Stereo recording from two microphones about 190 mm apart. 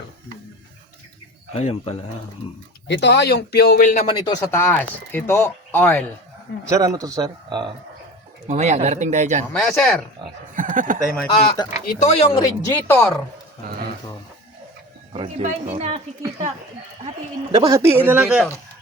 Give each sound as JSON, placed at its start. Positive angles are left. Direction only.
{"t": 1.5, "sound": "speech", "side_deg": 30}
{"t": 2.8, "sound": "speech", "side_deg": 65}
{"t": 4.1, "sound": "speech", "side_deg": 20}
{"t": 4.6, "sound": "speech", "side_deg": 10}
{"t": 6.7, "sound": "speech", "side_deg": -15}
{"t": 8.4, "sound": "speech", "side_deg": -35}
{"t": 9.5, "sound": "speech", "side_deg": 5}
{"t": 10.5, "sound": "a sound", "side_deg": -45}
{"t": 11.3, "sound": "speech", "side_deg": 25}
{"t": 11.9, "sound": "speech", "side_deg": 35}
{"t": 12.3, "sound": "speech", "side_deg": 20}
{"t": 15.1, "sound": "speech", "side_deg": -30}
{"t": 17.5, "sound": "speech", "side_deg": -20}